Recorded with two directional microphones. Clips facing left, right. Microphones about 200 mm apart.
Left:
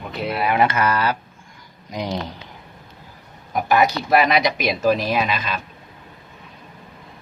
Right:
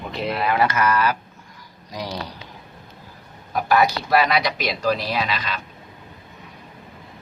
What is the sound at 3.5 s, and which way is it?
Speech, 20° left (ahead or behind).